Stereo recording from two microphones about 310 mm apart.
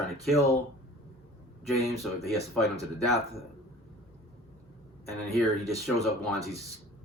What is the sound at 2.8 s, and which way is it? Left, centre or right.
Speech, centre.